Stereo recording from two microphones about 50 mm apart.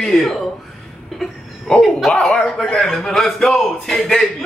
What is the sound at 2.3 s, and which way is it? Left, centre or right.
Speech, centre.